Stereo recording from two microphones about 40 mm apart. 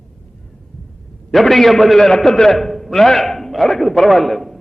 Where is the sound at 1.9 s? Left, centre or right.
Centre.